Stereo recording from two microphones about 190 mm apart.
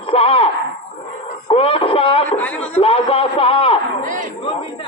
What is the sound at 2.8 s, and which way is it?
A man's voice, 30° left (ahead or behind).